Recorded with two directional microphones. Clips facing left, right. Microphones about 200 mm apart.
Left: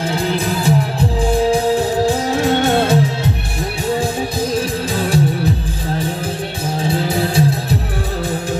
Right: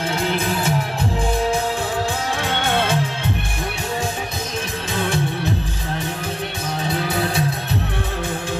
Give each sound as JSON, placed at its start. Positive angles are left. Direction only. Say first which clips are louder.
{"t": 0.1, "sound": "music", "louder": "left 2 dB", "side_deg": 35}
{"t": 4.6, "sound": "music", "louder": "left 6 dB", "side_deg": 35}
{"t": 6.8, "sound": "music", "louder": "left 4 dB", "side_deg": 30}